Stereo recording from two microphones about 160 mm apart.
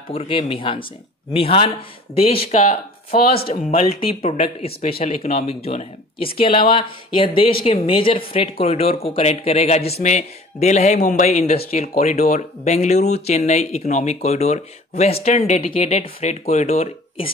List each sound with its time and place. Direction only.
0.1 s speech: 35° left (ahead or behind)